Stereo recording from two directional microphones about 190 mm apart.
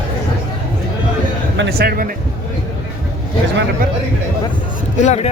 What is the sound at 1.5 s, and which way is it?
Speech, 65° right (ahead or behind).